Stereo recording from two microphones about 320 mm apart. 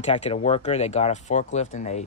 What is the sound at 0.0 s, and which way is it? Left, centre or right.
Speech, centre.